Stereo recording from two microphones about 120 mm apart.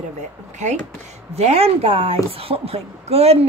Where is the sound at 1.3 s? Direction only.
60° right (ahead or behind).